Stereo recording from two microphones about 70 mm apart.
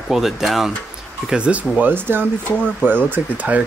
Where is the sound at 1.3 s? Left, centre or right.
Centre.